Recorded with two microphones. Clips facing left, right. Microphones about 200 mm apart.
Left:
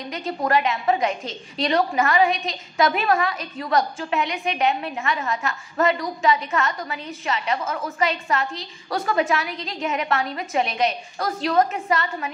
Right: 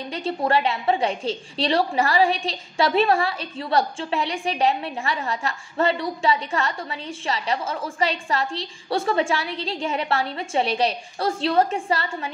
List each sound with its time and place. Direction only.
0.1 s a woman's voice: 30° right (ahead or behind)